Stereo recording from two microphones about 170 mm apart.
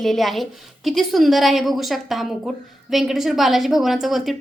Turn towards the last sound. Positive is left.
turn(degrees=0)  # may be behind; listen again after turning